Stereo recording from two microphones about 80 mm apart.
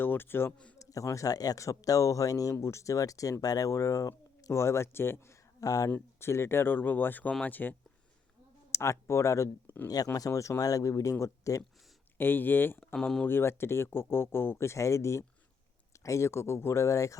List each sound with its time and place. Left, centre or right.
0.0 s speech: left
0.8 s speech: left
5.5 s speech: left
6.1 s speech: left
8.7 s speech: left
9.6 s speech: left
10.2 s speech: left
12.1 s speech: left
12.9 s speech: centre
13.2 s speech: left